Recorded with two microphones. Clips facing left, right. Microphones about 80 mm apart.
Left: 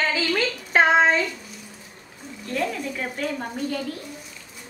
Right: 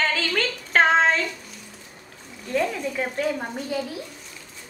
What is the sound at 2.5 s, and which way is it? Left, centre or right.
A woman's voice, centre.